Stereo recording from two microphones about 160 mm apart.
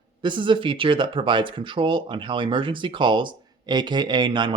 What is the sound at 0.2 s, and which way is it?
A man's voice, 30° right (ahead or behind).